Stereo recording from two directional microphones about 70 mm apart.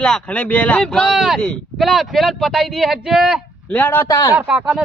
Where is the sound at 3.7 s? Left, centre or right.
Left.